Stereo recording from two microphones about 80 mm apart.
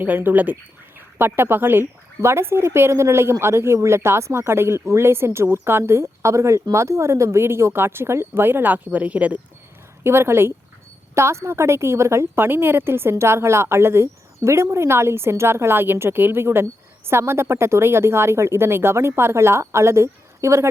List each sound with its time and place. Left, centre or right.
0.0 s speech: right
10.0 s speech: right